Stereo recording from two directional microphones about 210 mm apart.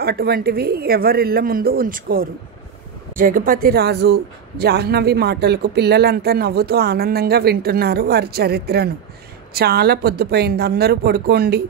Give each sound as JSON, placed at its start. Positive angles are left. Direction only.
{"t": 0.0, "sound": "speech", "side_deg": -45}